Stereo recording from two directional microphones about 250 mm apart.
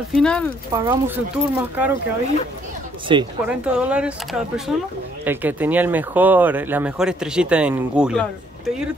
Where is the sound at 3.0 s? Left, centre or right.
Centre.